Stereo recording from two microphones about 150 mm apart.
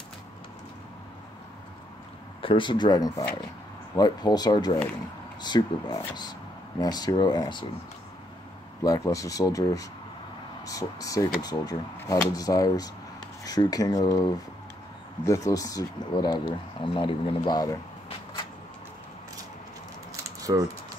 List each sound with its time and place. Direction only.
2.4 s speech: 35° left (ahead or behind)
8.8 s speech: 20° left (ahead or behind)
20.1 s a sound: 20° right (ahead or behind)